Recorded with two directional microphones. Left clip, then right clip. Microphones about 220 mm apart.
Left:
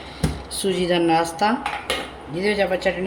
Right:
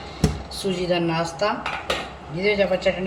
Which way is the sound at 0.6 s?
55° left (ahead or behind).